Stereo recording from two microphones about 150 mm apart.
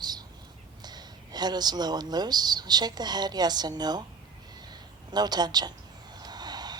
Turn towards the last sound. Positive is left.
turn(degrees=-25)  # may be behind; listen again after turning